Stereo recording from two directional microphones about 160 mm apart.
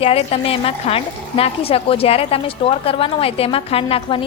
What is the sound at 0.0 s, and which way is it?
A woman's voice, 40° left (ahead or behind).